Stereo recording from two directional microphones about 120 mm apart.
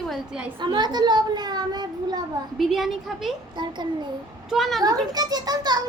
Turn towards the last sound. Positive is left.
turn(degrees=-35)  # may be behind; listen again after turning